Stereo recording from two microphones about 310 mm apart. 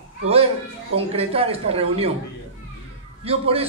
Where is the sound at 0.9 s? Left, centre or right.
Centre.